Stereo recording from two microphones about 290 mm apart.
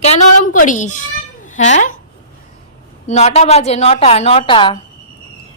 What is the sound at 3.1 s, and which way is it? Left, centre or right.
A woman's voice, left.